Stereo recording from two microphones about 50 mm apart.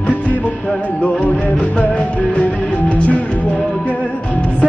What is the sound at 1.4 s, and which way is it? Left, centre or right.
Music, left.